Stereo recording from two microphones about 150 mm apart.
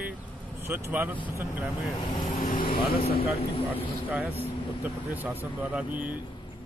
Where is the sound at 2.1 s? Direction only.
30° left (ahead or behind).